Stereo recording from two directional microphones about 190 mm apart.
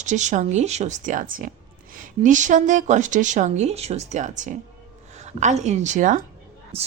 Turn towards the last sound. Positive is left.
turn(degrees=-30)  # may be behind; listen again after turning